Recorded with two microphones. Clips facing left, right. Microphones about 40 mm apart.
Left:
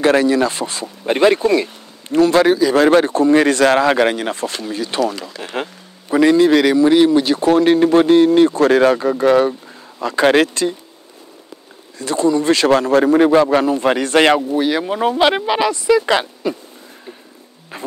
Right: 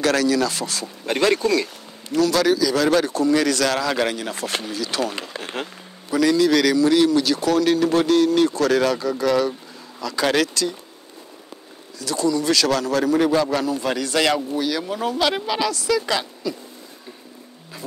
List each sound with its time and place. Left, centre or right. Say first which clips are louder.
0.0 s speech: left 5 dB; left
12.0 s speech: left 5 dB; left
16.4 s speech: left 6 dB; left